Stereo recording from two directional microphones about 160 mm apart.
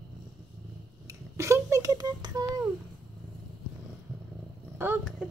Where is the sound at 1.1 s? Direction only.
20° right (ahead or behind).